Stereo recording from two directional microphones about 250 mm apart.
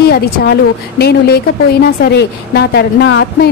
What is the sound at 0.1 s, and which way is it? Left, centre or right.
A woman's voice, left.